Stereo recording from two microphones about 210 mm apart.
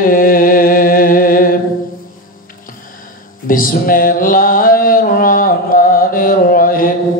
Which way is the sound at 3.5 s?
40° left (ahead or behind).